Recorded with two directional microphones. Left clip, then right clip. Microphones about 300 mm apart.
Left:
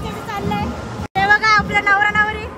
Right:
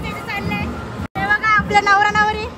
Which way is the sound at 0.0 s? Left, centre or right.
Centre.